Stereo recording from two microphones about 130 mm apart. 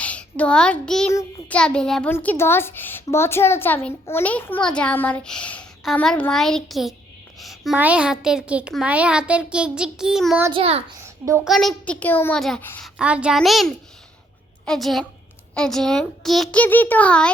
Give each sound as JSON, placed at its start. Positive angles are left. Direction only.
{"t": 0.0, "sound": "a child's voice", "side_deg": 10}
{"t": 7.3, "sound": "a sound", "side_deg": 0}
{"t": 7.8, "sound": "a child's voice", "side_deg": -10}
{"t": 10.5, "sound": "a child's voice", "side_deg": -50}
{"t": 11.0, "sound": "a sound", "side_deg": -20}
{"t": 11.4, "sound": "a woman's voice", "side_deg": 5}
{"t": 12.4, "sound": "speech", "side_deg": 5}
{"t": 12.8, "sound": "a woman's voice", "side_deg": -5}
{"t": 16.6, "sound": "a woman's voice", "side_deg": 15}